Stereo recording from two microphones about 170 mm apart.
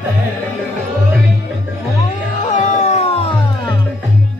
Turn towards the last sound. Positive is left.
turn(degrees=35)  # may be behind; listen again after turning